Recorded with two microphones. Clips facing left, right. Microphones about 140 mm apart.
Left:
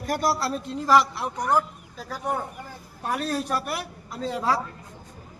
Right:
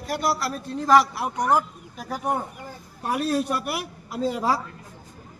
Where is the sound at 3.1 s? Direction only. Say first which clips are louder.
Right 3 dB; 5° right (ahead or behind).